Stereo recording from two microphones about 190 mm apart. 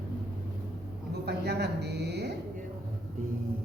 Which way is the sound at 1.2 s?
60° right (ahead or behind).